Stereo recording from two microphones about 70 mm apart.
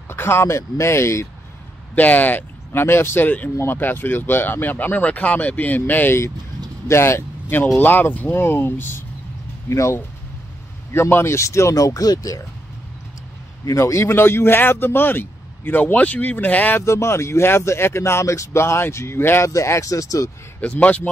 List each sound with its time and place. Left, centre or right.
0.1 s a man's voice: left
2.0 s speech: left
6.9 s a man's voice: left
9.7 s speech: left
11.1 s speech: left
13.7 s speech: left
14.0 s a man's voice: left
16.8 s a man's voice: left
19.5 s speech: left
20.6 s speech: centre